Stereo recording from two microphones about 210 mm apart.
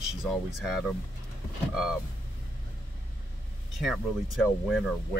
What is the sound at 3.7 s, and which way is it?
Speech, centre (ahead or behind).